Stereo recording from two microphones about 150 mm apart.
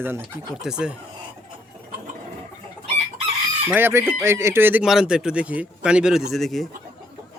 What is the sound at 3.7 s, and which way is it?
Speech, 15° right (ahead or behind).